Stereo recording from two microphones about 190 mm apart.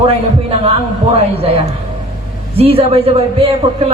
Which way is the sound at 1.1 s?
30° right (ahead or behind).